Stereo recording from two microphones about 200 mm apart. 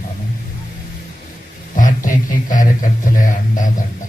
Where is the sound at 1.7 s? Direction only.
40° left (ahead or behind).